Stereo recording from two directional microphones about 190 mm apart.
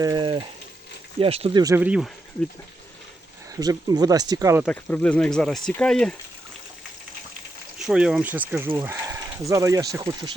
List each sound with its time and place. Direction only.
0.0 s speech: 20° right (ahead or behind)
1.6 s speech: 10° right (ahead or behind)
3.5 s speech: 20° right (ahead or behind)
4.6 s speech: 5° left (ahead or behind)
7.8 s speech: 5° right (ahead or behind)